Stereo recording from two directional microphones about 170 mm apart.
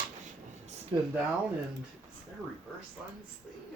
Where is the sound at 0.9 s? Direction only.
30° right (ahead or behind).